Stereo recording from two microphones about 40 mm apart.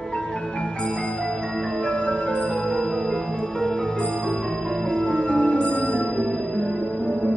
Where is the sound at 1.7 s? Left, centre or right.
Left.